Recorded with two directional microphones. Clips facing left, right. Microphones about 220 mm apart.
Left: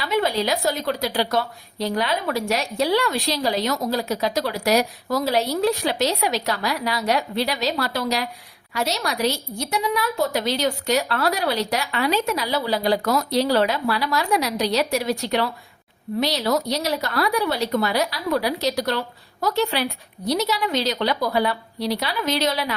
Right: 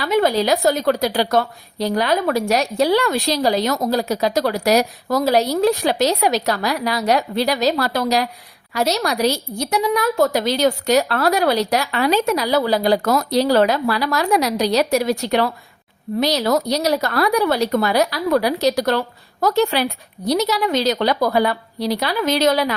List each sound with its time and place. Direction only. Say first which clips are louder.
0.0 s a woman's voice: right 5 dB; 45° right (ahead or behind)